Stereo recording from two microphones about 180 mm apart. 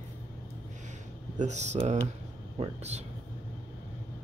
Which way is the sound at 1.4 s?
40° right (ahead or behind).